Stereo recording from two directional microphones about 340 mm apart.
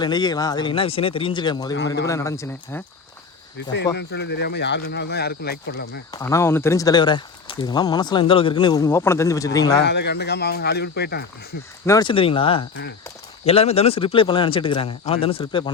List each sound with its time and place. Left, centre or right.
0.0 s speech: centre
3.9 s speech: left
6.1 s speech: centre
9.8 s speech: left
11.9 s speech: centre